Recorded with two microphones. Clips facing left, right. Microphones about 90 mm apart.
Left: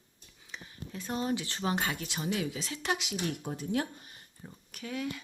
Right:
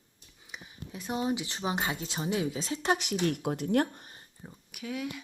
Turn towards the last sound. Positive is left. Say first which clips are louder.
# even
turn(degrees=-5)  # may be behind; listen again after turning